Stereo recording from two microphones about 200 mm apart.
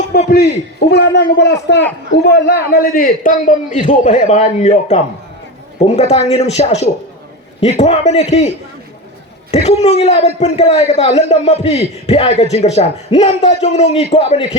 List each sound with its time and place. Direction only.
0.3 s a man's voice: 55° left (ahead or behind); by 8.5 s 35° left (ahead or behind)
9.6 s a man's voice: 30° left (ahead or behind)